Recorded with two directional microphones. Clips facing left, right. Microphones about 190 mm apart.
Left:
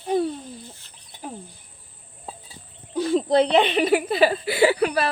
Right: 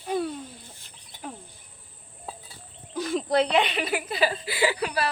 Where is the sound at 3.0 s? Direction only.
30° left (ahead or behind).